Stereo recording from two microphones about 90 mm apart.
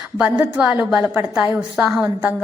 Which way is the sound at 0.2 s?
15° right (ahead or behind).